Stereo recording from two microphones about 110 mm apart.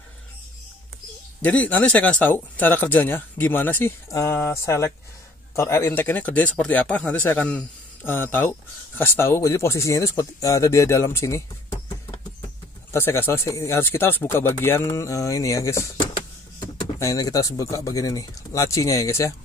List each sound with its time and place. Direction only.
1.4 s speech: 15° left (ahead or behind)
12.9 s speech: 20° left (ahead or behind)